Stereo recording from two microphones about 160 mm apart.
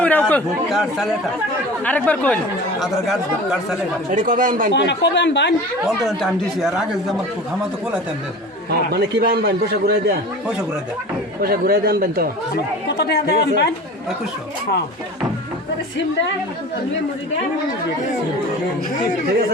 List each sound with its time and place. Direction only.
0.0 s speech: 10° left (ahead or behind)
0.7 s speech: centre (ahead or behind)
1.8 s speech: 10° left (ahead or behind)
4.1 s speech: 55° right (ahead or behind)
4.7 s speech: 90° left
6.1 s speech: centre (ahead or behind)
8.7 s a man's voice: 80° right
11.3 s speech: 70° right (ahead or behind)
13.0 s speech: 90° left